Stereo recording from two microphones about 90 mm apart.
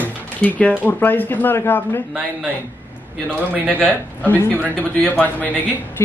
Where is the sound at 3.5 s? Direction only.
20° right (ahead or behind).